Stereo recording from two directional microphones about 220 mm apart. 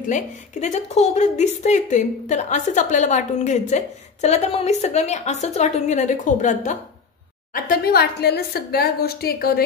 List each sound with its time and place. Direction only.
0.0 s a woman's voice: 35° left (ahead or behind)